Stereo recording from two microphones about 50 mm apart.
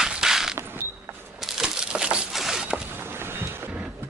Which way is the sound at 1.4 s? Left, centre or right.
Centre.